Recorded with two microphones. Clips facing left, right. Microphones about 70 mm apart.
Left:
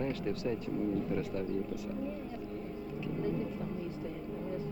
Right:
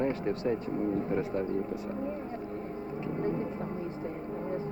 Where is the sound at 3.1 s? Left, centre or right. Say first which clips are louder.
Right 3 dB; right.